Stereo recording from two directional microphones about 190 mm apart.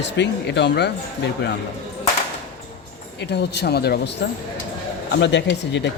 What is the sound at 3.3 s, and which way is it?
Speech, 60° left (ahead or behind).